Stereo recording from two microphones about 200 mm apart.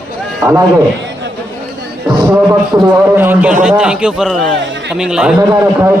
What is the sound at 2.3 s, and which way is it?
A man's voice, 5° right (ahead or behind).